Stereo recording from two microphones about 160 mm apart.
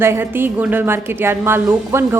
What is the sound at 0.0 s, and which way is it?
A woman's voice, 15° right (ahead or behind).